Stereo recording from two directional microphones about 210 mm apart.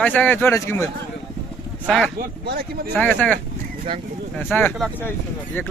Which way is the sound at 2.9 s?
5° left (ahead or behind).